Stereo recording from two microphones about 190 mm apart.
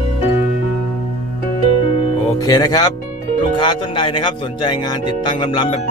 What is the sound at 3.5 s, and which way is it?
Speech, 25° left (ahead or behind).